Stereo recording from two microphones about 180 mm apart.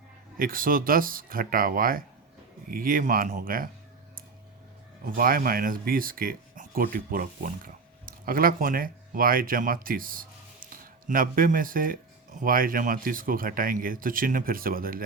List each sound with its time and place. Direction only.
0.3 s speech: 50° right (ahead or behind)
5.0 s speech: 55° right (ahead or behind)